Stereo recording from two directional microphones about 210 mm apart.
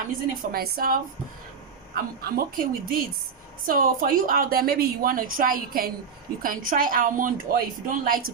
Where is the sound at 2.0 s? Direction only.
45° right (ahead or behind).